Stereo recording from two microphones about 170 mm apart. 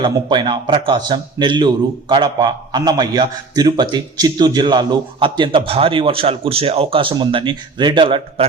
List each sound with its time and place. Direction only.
0.0 s a man's voice: 25° right (ahead or behind)